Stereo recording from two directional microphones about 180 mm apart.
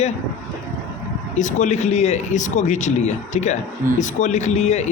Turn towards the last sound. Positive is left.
turn(degrees=40)  # may be behind; listen again after turning